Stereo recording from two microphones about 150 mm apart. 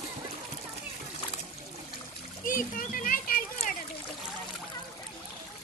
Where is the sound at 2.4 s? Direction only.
65° left (ahead or behind).